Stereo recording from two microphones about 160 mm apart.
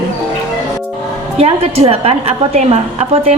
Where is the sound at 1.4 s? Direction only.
40° right (ahead or behind).